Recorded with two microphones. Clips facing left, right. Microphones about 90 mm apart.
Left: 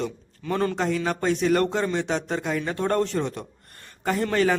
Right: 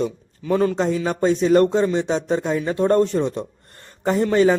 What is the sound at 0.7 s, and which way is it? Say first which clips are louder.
Speech: right 4 dB; 20° right (ahead or behind).